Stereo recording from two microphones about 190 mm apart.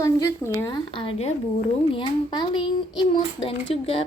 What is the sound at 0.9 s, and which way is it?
A woman's voice, 30° left (ahead or behind).